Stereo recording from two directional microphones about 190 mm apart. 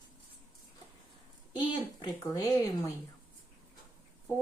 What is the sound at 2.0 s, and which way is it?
Speech, 20° left (ahead or behind).